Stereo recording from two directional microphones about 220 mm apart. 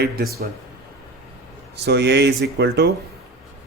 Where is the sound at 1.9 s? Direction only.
50° right (ahead or behind).